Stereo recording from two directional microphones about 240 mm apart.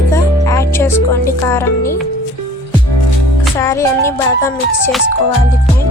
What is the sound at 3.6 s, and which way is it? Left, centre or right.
A woman's voice, centre.